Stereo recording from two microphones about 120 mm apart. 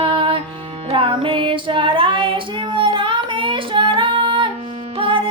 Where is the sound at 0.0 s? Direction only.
45° right (ahead or behind).